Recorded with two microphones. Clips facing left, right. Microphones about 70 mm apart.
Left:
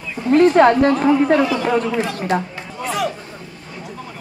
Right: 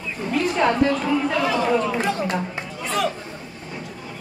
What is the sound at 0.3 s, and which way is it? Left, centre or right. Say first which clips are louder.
A woman's voice: left 9 dB; left.